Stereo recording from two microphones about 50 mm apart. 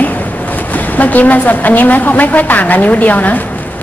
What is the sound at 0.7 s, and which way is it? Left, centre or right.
A woman's voice, left.